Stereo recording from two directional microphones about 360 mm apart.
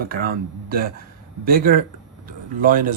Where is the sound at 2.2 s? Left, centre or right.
Right.